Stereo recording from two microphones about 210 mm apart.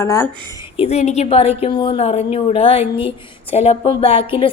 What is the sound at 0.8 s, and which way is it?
Speech, 30° left (ahead or behind).